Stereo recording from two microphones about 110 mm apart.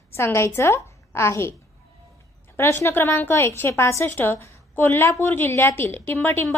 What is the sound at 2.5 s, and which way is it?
A woman's voice, 25° left (ahead or behind).